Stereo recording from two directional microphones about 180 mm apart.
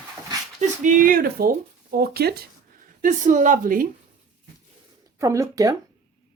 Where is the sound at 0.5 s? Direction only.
45° right (ahead or behind); by 2.4 s 60° right (ahead or behind).